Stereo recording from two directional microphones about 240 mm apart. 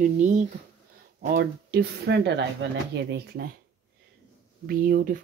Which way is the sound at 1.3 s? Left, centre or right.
Right.